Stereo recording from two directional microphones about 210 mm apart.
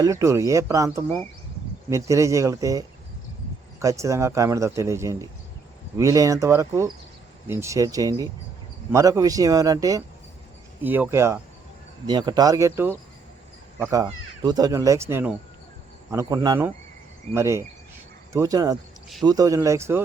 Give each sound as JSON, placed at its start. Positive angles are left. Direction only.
{"t": 0.0, "sound": "speech", "side_deg": -15}